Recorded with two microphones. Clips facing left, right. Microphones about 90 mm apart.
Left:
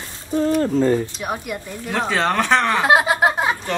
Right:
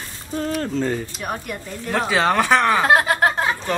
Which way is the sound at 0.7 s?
40° left (ahead or behind).